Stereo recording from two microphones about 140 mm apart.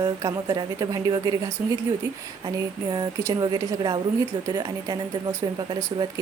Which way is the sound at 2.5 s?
30° right (ahead or behind).